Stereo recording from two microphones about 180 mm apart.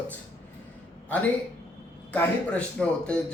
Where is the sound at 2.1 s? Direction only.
5° left (ahead or behind).